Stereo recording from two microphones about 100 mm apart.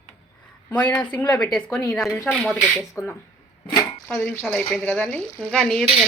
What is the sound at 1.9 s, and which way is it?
Speech, centre (ahead or behind).